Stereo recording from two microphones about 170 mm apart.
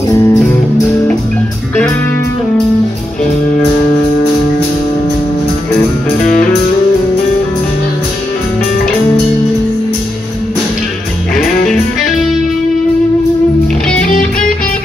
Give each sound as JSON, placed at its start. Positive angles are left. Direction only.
{"t": 0.1, "sound": "music", "side_deg": 20}
{"t": 11.3, "sound": "music", "side_deg": 5}